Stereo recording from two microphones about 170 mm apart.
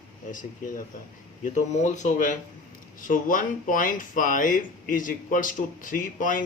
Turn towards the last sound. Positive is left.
turn(degrees=50)  # may be behind; listen again after turning